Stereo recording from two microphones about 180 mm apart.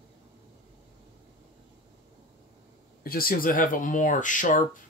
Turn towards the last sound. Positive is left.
turn(degrees=45)  # may be behind; listen again after turning